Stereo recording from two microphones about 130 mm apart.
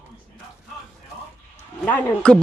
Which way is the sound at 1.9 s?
10° left (ahead or behind).